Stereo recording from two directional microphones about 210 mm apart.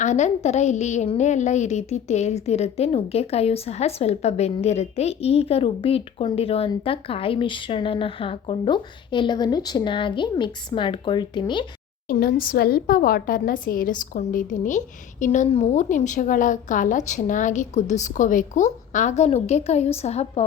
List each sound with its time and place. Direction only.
0.0 s a woman's voice: 35° left (ahead or behind)
12.0 s a woman's voice: 45° left (ahead or behind)